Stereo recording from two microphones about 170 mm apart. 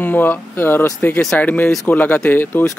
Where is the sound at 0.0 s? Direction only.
10° left (ahead or behind).